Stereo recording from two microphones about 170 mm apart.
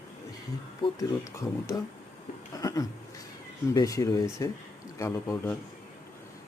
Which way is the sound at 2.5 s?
20° left (ahead or behind).